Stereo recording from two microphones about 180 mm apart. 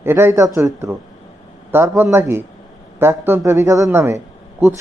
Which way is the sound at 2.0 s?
15° right (ahead or behind).